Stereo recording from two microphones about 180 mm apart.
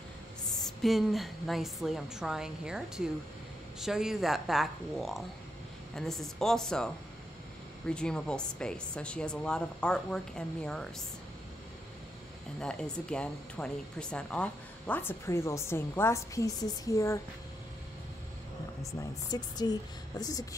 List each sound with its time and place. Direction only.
0.8 s speech: centre (ahead or behind)
7.9 s speech: 5° left (ahead or behind)
12.5 s speech: 5° left (ahead or behind)
18.8 s a woman's voice: 20° left (ahead or behind)